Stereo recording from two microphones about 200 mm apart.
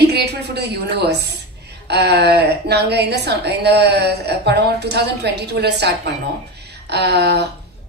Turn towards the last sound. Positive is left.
turn(degrees=-55)  # may be behind; listen again after turning